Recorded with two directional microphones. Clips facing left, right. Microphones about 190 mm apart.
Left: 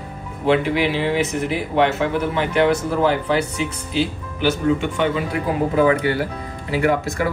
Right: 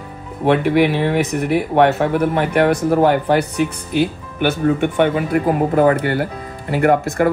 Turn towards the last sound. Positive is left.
turn(degrees=-55)  # may be behind; listen again after turning